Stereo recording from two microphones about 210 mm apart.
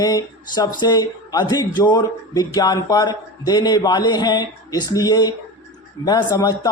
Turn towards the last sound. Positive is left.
turn(degrees=20)  # may be behind; listen again after turning